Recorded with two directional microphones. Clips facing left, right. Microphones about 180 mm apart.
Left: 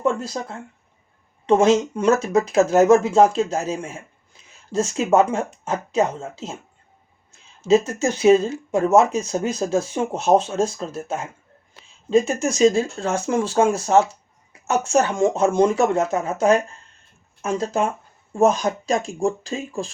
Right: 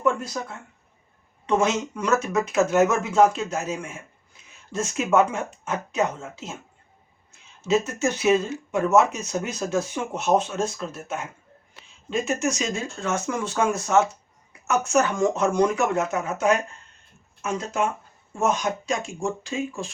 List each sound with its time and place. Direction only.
0.0 s speech: 30° left (ahead or behind)
7.7 s speech: 30° left (ahead or behind)